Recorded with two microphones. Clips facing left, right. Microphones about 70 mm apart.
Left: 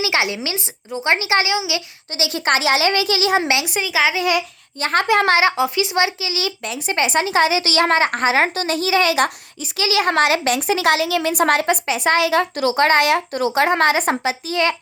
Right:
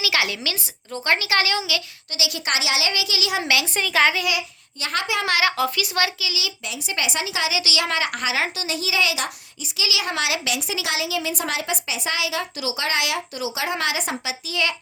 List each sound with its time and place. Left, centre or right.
0.0 s a child's voice: left
2.1 s speech: left
3.8 s a child's voice: centre
4.3 s speech: left
5.4 s speech: left